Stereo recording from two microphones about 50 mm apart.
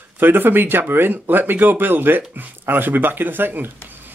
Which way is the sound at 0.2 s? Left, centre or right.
Right.